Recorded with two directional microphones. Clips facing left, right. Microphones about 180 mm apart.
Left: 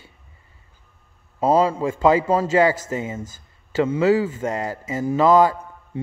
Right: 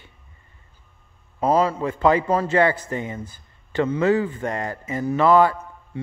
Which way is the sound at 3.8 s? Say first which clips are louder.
Left 2 dB; 10° left (ahead or behind).